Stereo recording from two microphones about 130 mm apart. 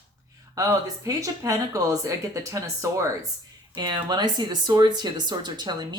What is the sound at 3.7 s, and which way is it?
A woman's voice, 35° right (ahead or behind).